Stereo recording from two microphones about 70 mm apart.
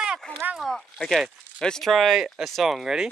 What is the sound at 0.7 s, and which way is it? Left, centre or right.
Speech, centre.